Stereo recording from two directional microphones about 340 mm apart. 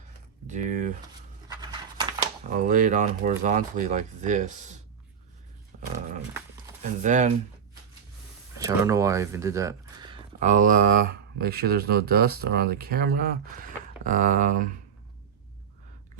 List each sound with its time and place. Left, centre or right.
0.4 s speech: right
1.5 s a sound: centre
2.5 s speech: right
6.8 s speech: right
8.5 s speech: centre